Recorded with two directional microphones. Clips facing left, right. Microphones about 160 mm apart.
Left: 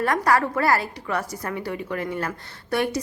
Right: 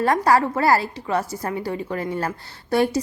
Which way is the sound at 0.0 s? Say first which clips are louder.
Right 3 dB; 30° right (ahead or behind).